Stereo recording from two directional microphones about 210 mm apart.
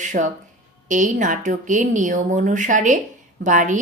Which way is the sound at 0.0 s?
35° right (ahead or behind).